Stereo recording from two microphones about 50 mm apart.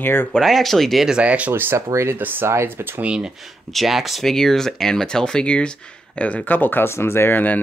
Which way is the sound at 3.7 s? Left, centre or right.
Centre.